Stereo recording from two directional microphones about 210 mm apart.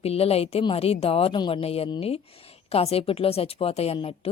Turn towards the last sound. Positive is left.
turn(degrees=30)  # may be behind; listen again after turning